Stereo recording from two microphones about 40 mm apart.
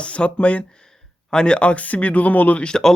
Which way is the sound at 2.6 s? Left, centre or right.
Centre.